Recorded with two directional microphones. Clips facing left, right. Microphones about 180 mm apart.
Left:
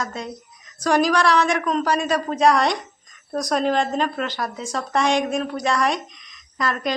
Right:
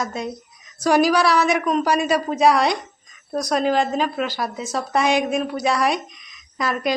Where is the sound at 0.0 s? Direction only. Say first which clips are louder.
Right 3 dB; 10° right (ahead or behind).